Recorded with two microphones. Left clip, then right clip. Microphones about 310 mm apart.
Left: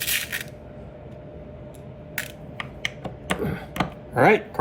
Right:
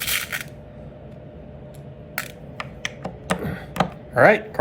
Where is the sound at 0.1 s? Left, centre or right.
Centre.